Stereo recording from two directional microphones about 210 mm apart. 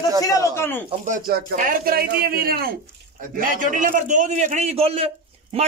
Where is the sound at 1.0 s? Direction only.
35° right (ahead or behind).